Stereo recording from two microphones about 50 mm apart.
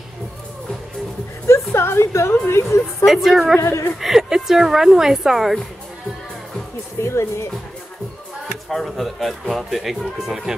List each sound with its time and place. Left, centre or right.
1.8 s a woman's voice: left
3.1 s speech: centre
7.0 s a woman's voice: left
8.6 s speech: centre